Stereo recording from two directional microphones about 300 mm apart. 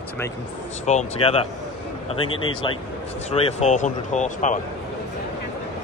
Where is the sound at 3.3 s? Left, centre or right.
Left.